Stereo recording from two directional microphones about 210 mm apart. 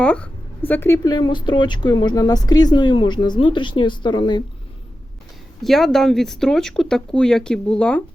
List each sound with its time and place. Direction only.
0.0 s a woman's voice: 5° left (ahead or behind); by 4.4 s 20° left (ahead or behind)
5.6 s speech: centre (ahead or behind)